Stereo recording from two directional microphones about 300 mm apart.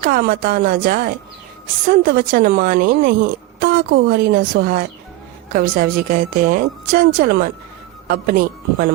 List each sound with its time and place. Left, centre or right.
0.0 s a woman's voice: right